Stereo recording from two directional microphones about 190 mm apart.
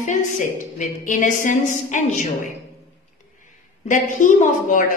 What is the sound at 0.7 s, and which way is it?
A woman's voice, 40° left (ahead or behind).